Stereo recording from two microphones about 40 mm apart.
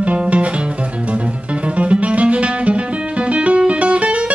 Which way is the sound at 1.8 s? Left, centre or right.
Right.